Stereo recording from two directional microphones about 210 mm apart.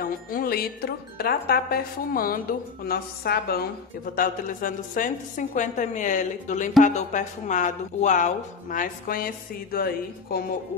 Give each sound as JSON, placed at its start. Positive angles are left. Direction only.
{"t": 0.0, "sound": "speech", "side_deg": 45}